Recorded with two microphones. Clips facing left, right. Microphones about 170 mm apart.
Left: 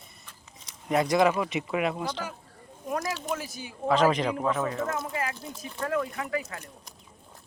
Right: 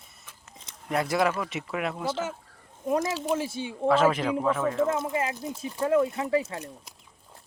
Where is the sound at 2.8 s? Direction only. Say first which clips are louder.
Right 5 dB; 25° right (ahead or behind).